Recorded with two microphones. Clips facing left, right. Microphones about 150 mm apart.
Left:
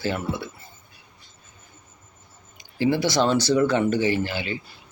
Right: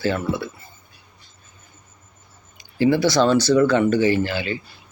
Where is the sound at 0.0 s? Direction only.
20° left (ahead or behind).